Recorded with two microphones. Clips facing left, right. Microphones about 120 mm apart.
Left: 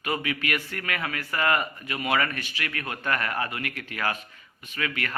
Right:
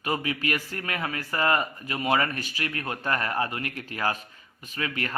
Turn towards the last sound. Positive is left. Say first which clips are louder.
# even
turn(degrees=-35)  # may be behind; listen again after turning